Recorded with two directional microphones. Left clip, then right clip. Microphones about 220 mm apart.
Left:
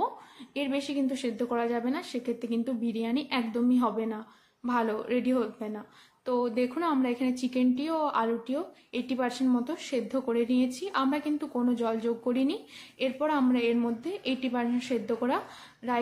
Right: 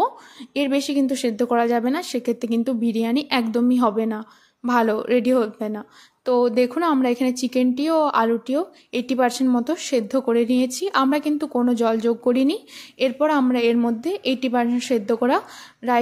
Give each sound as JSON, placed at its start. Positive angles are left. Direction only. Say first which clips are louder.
{"t": 0.6, "sound": "a woman's voice", "louder": "right 9 dB", "side_deg": -40}